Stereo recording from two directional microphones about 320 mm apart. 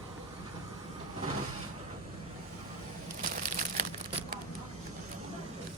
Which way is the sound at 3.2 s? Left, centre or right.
Right.